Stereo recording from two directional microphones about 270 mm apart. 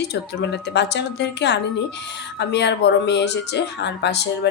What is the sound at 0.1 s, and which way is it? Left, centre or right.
Speech, left.